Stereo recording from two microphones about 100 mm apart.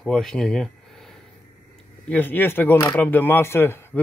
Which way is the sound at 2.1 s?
20° left (ahead or behind).